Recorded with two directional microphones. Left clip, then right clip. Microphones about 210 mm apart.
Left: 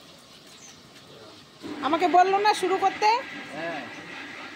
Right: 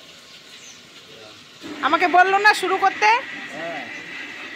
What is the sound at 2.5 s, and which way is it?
Speech, 20° right (ahead or behind).